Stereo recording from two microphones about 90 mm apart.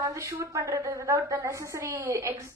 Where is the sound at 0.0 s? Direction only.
35° right (ahead or behind).